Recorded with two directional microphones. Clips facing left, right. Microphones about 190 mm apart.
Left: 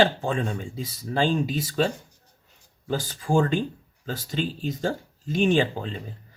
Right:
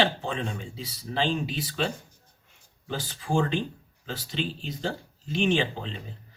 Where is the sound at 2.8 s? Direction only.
45° left (ahead or behind).